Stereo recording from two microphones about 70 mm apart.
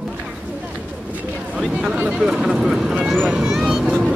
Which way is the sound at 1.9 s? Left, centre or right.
Centre.